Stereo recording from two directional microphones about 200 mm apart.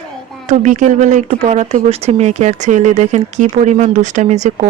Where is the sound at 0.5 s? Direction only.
40° right (ahead or behind).